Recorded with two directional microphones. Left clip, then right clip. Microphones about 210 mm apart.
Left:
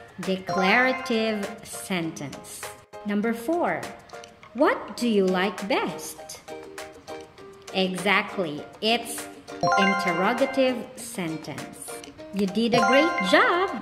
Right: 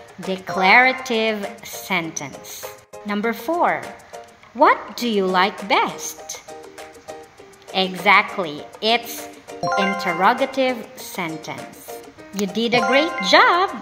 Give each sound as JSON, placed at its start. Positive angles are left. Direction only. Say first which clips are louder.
{"t": 0.3, "sound": "speech", "louder": "right 7 dB", "side_deg": 15}
{"t": 4.6, "sound": "speech", "louder": "right 7 dB", "side_deg": 15}
{"t": 7.7, "sound": "speech", "louder": "right 8 dB", "side_deg": 15}
{"t": 9.6, "sound": "speech", "louder": "right 1 dB", "side_deg": 0}
{"t": 9.9, "sound": "speech", "louder": "right 5 dB", "side_deg": 15}
{"t": 12.5, "sound": "speech", "louder": "right 3 dB", "side_deg": 15}